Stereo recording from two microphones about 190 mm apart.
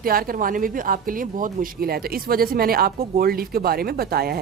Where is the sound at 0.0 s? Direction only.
50° right (ahead or behind).